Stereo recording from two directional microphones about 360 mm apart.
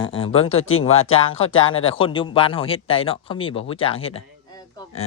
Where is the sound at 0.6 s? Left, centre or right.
Left.